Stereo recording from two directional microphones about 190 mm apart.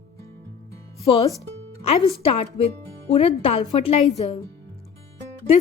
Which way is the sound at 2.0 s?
30° left (ahead or behind).